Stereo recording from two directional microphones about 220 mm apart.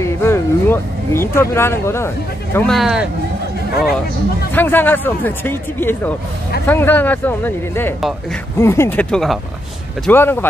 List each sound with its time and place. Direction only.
0.2 s speech: 10° left (ahead or behind)
4.5 s speech: 10° left (ahead or behind)